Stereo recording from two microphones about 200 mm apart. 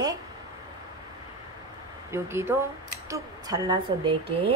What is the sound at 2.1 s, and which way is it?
Speech, 10° right (ahead or behind).